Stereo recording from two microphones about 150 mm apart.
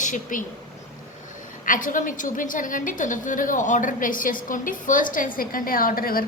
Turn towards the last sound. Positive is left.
turn(degrees=75)  # may be behind; listen again after turning